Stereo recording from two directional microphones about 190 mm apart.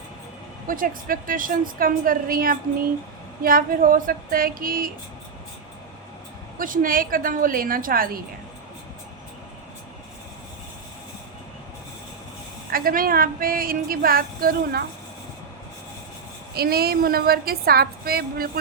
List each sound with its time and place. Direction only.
0.7 s a woman's voice: 45° right (ahead or behind)
6.6 s a woman's voice: 45° right (ahead or behind)
12.7 s a woman's voice: 50° right (ahead or behind)
16.6 s a woman's voice: 55° right (ahead or behind)